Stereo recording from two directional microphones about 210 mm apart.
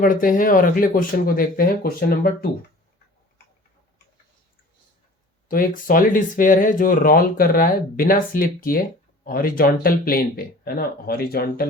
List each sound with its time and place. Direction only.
0.0 s speech: 40° left (ahead or behind)
5.5 s speech: 40° left (ahead or behind)